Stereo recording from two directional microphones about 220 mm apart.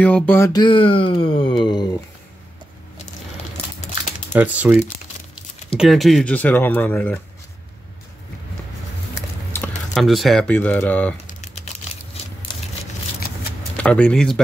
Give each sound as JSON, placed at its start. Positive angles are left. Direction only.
{"t": 0.0, "sound": "speech", "side_deg": 10}
{"t": 4.3, "sound": "speech", "side_deg": -5}
{"t": 9.5, "sound": "speech", "side_deg": 5}
{"t": 11.2, "sound": "a sound", "side_deg": 35}
{"t": 12.5, "sound": "a sound", "side_deg": 20}
{"t": 13.7, "sound": "speech", "side_deg": 5}